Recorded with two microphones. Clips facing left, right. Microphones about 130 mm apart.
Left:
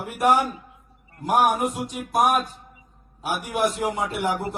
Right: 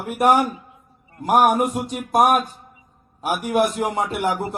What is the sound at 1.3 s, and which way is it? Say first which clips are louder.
A man's voice: right 4 dB; 60° right (ahead or behind).